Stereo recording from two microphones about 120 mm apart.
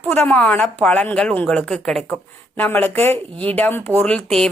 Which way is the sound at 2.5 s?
15° left (ahead or behind).